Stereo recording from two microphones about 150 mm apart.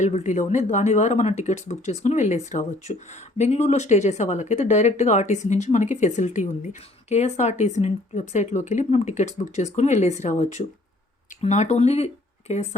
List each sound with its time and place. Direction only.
0.0 s speech: 55° left (ahead or behind)